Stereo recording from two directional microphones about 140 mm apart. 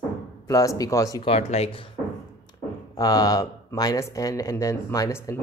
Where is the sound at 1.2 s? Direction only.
45° left (ahead or behind).